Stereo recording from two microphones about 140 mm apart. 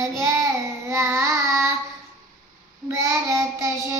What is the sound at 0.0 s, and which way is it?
Child singing, 20° right (ahead or behind).